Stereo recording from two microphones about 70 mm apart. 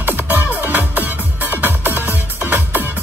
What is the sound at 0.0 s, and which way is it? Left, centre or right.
Music, right.